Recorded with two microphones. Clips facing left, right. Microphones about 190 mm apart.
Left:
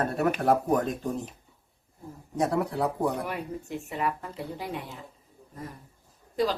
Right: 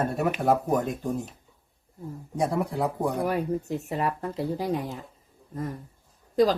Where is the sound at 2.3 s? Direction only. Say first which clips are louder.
Even; 10° right (ahead or behind).